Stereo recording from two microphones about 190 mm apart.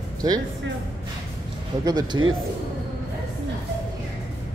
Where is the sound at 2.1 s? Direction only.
20° right (ahead or behind).